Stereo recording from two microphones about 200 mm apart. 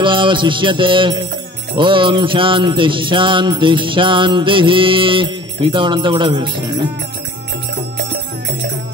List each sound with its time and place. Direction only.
0.0 s music: 25° right (ahead or behind)
8.0 s music: 60° right (ahead or behind)